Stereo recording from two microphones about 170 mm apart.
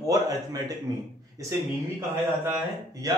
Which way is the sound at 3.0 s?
20° right (ahead or behind).